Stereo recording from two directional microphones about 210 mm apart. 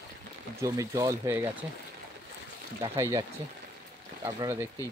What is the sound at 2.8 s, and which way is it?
Speech, 20° right (ahead or behind).